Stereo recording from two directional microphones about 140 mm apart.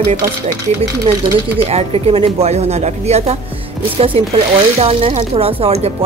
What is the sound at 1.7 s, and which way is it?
Speech, 45° right (ahead or behind).